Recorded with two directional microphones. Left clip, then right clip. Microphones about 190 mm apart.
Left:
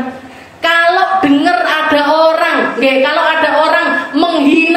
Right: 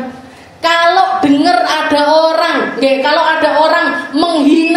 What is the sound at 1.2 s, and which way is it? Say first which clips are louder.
A woman's voice: right 1 dB; 40° right (ahead or behind).